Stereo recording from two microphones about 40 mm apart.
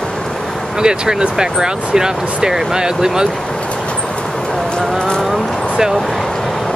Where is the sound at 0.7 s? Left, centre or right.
Centre.